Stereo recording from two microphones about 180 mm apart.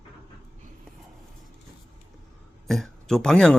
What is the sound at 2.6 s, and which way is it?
Speech, centre (ahead or behind).